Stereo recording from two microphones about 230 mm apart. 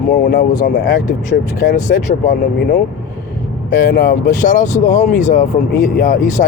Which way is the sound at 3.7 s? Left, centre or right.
Left.